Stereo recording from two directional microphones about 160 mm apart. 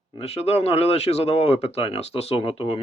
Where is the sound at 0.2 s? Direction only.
40° left (ahead or behind).